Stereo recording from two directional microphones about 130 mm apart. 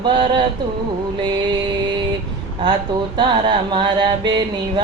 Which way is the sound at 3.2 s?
40° right (ahead or behind).